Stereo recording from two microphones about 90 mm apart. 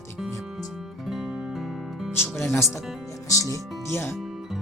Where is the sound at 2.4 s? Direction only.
30° left (ahead or behind).